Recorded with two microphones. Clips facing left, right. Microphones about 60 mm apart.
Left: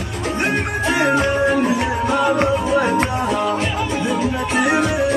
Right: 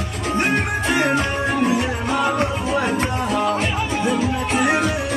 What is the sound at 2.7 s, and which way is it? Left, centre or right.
Music, centre.